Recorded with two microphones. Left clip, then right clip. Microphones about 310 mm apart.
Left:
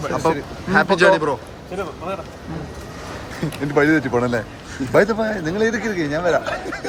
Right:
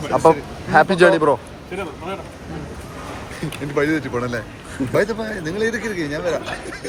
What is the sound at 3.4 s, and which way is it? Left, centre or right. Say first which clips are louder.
A man's voice: left 3 dB; left.